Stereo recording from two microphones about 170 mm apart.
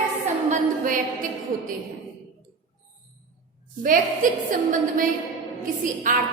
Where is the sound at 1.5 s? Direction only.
55° right (ahead or behind).